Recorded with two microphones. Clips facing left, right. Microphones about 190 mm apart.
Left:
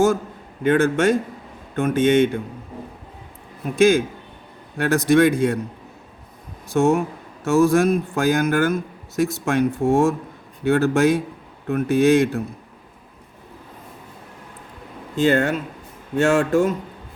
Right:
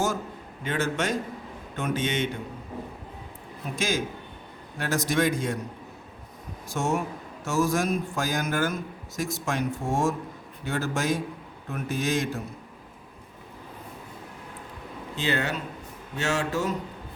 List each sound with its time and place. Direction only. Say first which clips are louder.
0.6 s speech: left 11 dB; 55° left (ahead or behind)
3.8 s speech: left 13 dB; 55° left (ahead or behind)
6.7 s speech: left 9 dB; 60° left (ahead or behind)
15.1 s speech: left 10 dB; 50° left (ahead or behind)